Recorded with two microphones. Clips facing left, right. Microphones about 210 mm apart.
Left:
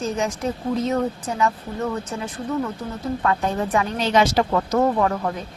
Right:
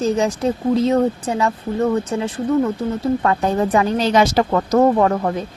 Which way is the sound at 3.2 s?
40° right (ahead or behind).